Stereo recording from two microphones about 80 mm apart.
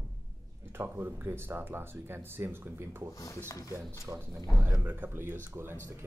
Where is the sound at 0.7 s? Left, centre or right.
Right.